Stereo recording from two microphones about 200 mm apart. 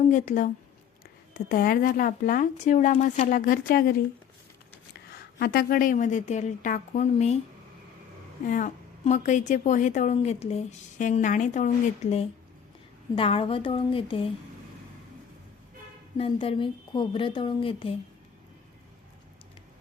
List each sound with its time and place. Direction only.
0.1 s a woman's voice: 40° left (ahead or behind)
5.4 s a woman's voice: 45° left (ahead or behind)
8.4 s a woman's voice: 40° left (ahead or behind)
16.1 s a woman's voice: 30° left (ahead or behind)